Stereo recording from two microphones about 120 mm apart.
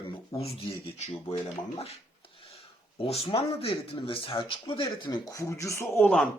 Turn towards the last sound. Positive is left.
turn(degrees=10)  # may be behind; listen again after turning